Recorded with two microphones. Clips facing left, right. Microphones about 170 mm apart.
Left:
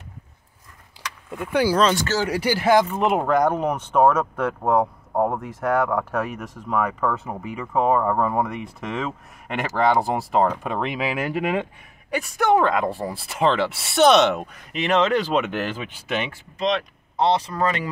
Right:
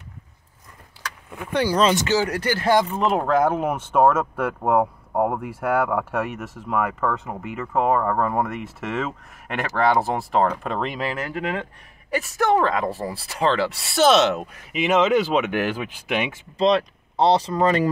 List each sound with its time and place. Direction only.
1.5 s speech: 10° left (ahead or behind)
2.0 s speech: 15° right (ahead or behind)
2.2 s speech: 10° left (ahead or behind)
11.2 s speech: 15° left (ahead or behind)
12.1 s speech: centre (ahead or behind)
16.5 s speech: 35° right (ahead or behind)